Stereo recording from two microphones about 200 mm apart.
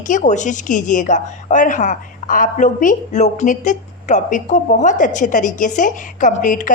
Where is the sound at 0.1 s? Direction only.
35° left (ahead or behind).